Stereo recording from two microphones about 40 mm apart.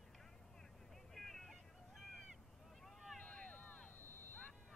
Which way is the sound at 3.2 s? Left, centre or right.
Left.